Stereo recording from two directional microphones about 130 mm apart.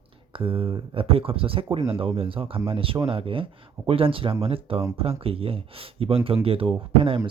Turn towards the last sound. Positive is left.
turn(degrees=-45)  # may be behind; listen again after turning